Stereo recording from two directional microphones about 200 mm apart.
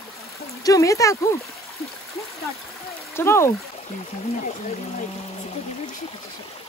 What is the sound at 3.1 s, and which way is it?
Speech, 15° left (ahead or behind).